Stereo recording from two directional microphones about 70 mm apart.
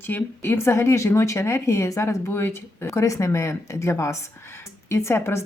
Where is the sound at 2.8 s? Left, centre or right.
Left.